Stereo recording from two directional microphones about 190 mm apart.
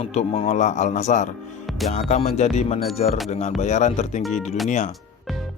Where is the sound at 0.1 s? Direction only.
35° left (ahead or behind).